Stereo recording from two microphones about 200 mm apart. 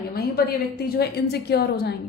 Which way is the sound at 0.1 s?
50° left (ahead or behind).